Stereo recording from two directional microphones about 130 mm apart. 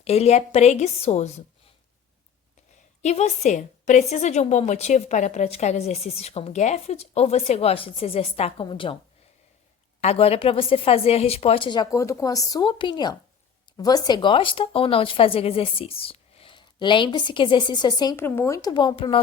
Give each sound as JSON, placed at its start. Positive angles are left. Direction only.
{"t": 0.0, "sound": "a woman's voice", "side_deg": 55}
{"t": 3.0, "sound": "a woman's voice", "side_deg": 60}
{"t": 10.0, "sound": "a woman's voice", "side_deg": 50}
{"t": 18.2, "sound": "speech", "side_deg": 20}